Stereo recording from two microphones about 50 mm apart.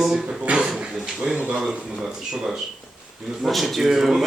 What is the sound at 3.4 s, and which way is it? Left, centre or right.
Speech, centre.